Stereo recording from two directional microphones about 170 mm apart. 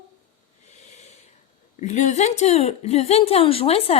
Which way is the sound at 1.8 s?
45° left (ahead or behind).